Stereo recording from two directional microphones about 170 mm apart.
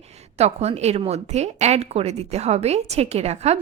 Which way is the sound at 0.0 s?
40° right (ahead or behind).